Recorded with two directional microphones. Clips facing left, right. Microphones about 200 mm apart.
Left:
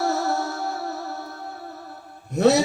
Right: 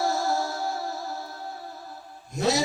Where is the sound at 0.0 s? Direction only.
65° left (ahead or behind).